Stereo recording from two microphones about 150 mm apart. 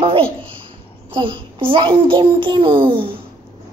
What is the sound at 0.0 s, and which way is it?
A child's voice, 35° right (ahead or behind).